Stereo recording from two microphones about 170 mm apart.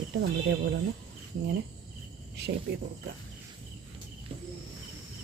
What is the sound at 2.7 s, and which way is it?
Speech, 65° right (ahead or behind).